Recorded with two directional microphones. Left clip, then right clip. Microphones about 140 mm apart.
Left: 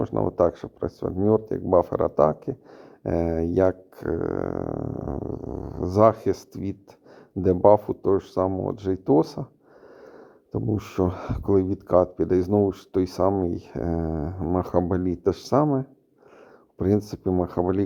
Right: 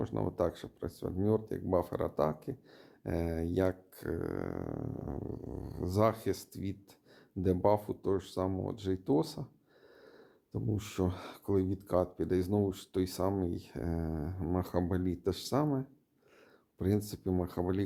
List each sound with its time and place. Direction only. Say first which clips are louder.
0.0 s speech: left 12 dB; 35° left (ahead or behind)